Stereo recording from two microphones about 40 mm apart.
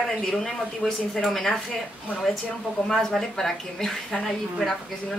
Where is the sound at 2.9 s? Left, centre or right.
Centre.